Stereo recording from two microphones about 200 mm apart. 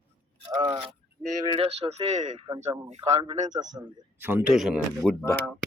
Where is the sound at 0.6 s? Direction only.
25° right (ahead or behind).